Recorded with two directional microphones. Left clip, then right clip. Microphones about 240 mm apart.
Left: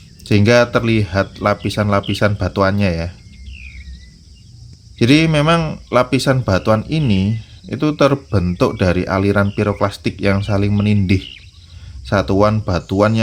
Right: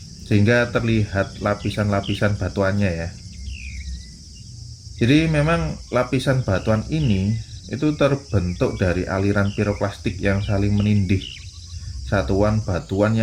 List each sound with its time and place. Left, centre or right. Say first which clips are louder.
0.3 s speech: left 6 dB; left
4.9 s speech: left 5 dB; left